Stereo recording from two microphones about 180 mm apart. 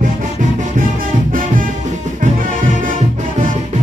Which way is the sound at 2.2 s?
50° right (ahead or behind).